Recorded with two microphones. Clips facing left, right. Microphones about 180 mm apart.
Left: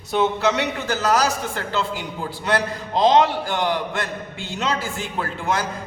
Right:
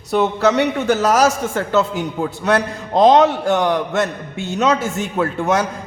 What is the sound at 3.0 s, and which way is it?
A man's voice, 65° right (ahead or behind).